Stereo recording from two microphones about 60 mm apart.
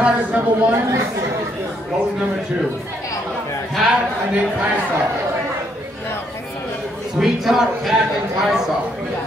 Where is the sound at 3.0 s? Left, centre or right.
Left.